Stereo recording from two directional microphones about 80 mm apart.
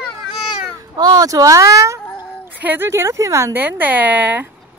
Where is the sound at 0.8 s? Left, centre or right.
Right.